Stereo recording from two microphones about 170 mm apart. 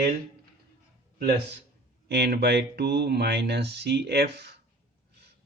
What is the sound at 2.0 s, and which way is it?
Speech, 75° right (ahead or behind).